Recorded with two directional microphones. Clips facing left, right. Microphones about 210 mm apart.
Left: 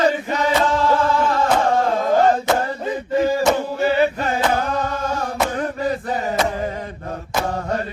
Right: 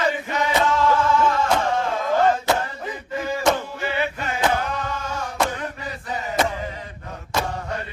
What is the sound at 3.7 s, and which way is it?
Chant, 40° left (ahead or behind).